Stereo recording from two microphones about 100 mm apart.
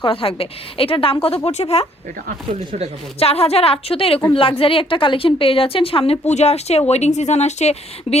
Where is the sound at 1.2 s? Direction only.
80° left.